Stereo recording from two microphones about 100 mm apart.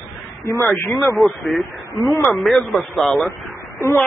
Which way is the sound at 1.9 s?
35° left (ahead or behind).